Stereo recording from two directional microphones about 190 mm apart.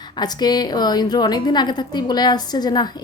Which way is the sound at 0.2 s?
20° left (ahead or behind).